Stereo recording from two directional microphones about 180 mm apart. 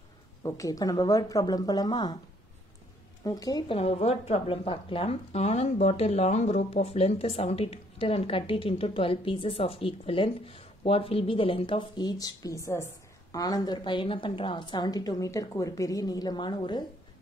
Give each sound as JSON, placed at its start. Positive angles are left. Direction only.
{"t": 0.4, "sound": "a woman's voice", "side_deg": 20}
{"t": 3.3, "sound": "a woman's voice", "side_deg": 20}